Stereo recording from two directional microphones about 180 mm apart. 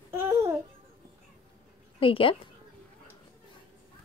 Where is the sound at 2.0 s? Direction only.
30° left (ahead or behind).